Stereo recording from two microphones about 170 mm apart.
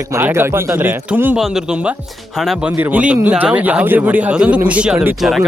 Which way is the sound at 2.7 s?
10° right (ahead or behind).